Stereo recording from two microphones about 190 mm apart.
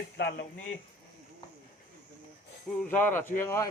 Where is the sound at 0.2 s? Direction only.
65° left (ahead or behind).